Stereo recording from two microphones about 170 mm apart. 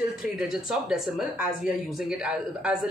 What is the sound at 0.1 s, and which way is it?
Speech, 5° right (ahead or behind).